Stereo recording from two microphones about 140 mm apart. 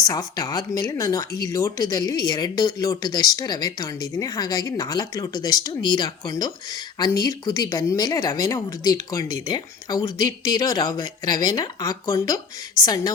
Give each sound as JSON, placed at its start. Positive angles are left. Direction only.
{"t": 0.1, "sound": "speech", "side_deg": 25}